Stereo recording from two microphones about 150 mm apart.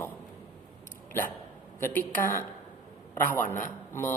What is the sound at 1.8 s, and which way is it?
Speech, 15° left (ahead or behind).